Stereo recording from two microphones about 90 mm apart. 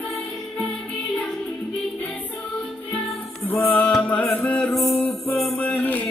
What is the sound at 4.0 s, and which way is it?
Music, 15° left (ahead or behind).